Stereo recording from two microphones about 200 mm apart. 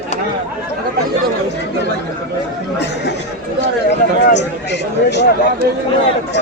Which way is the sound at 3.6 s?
60° left (ahead or behind).